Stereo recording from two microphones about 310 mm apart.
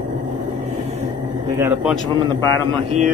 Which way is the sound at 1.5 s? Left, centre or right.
Centre.